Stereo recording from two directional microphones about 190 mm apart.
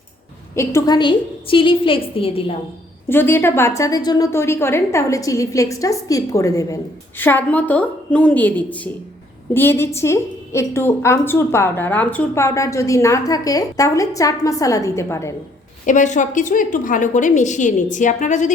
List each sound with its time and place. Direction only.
0.5 s a woman's voice: 15° left (ahead or behind); by 2.6 s 30° left (ahead or behind)
3.1 s a woman's voice: 10° left (ahead or behind)
15.9 s a woman's voice: 40° left (ahead or behind)